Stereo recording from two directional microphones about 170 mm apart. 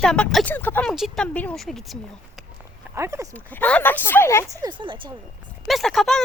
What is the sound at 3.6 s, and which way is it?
Speech, 10° left (ahead or behind).